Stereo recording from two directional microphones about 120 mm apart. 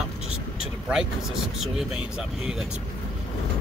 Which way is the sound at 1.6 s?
5° right (ahead or behind).